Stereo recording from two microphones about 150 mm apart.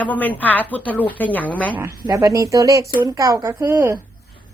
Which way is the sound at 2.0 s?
25° right (ahead or behind).